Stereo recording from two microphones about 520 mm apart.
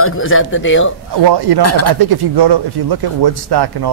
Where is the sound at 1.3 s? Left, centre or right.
Right.